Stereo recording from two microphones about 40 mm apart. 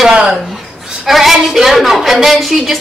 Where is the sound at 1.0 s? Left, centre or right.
Centre.